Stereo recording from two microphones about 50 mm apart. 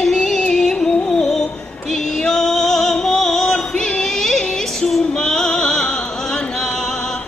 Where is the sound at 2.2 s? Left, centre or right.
Centre.